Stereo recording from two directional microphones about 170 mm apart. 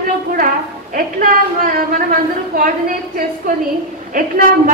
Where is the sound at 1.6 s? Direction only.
55° right (ahead or behind).